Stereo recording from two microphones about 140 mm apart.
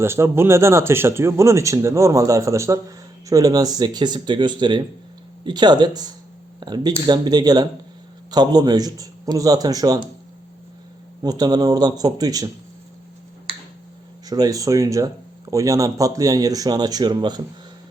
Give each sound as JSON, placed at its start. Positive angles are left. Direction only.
{"t": 0.0, "sound": "speech", "side_deg": -15}
{"t": 11.2, "sound": "speech", "side_deg": -30}
{"t": 14.3, "sound": "speech", "side_deg": -25}